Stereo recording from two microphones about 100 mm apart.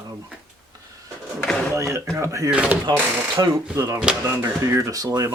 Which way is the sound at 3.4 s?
40° right (ahead or behind).